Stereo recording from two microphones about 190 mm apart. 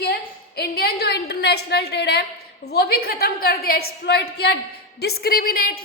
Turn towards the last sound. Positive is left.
turn(degrees=50)  # may be behind; listen again after turning